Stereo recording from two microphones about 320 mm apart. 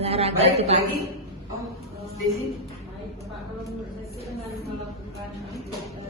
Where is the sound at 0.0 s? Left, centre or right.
Centre.